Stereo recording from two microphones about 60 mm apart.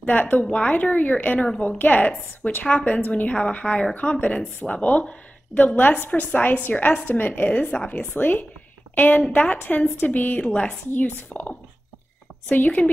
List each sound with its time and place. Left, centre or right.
0.0 s a woman's voice: left
7.5 s a woman's voice: centre